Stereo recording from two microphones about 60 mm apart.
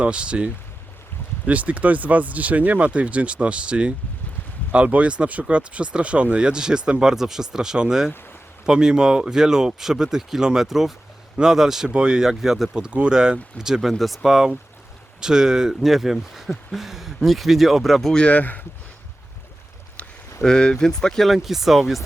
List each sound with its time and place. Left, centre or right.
0.0 s speech: centre
18.2 s speech: left
20.4 s speech: centre
21.2 s speech: centre